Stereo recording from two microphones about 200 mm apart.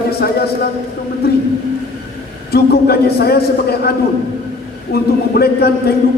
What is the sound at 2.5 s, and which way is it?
A man's voice, 55° left (ahead or behind).